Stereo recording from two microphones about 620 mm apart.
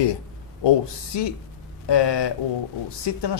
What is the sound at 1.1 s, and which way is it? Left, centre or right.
Speech, left.